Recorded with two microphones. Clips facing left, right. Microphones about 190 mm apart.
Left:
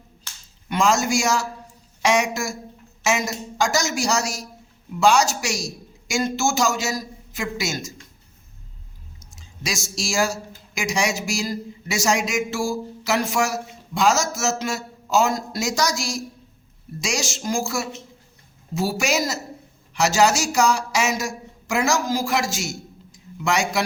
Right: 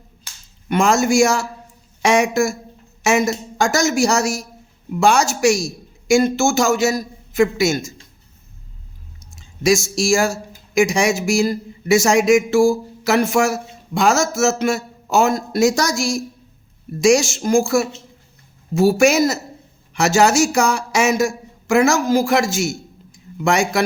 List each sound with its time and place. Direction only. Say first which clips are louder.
0.7 s a man's voice: right 5 dB; 55° right (ahead or behind)
9.3 s a man's voice: right 14 dB; 50° right (ahead or behind)